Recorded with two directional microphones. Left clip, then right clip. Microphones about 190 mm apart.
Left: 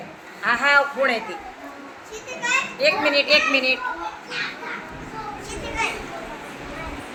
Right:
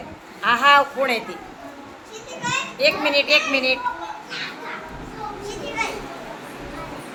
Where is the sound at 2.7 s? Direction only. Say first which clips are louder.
Right 2 dB; 10° right (ahead or behind).